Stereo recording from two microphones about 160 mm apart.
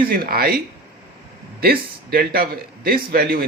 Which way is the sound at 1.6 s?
70° right (ahead or behind).